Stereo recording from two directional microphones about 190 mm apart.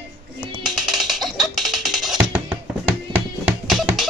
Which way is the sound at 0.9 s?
Centre (ahead or behind).